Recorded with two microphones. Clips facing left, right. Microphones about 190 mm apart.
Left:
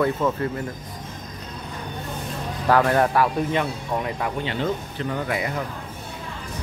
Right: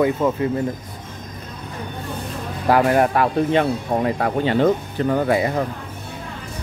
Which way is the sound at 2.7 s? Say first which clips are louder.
Right 3 dB; 15° right (ahead or behind).